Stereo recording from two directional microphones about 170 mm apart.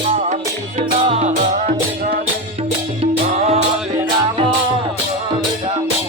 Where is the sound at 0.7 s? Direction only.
40° right (ahead or behind).